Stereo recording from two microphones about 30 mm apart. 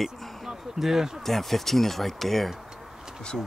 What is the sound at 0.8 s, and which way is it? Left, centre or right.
Speech, centre.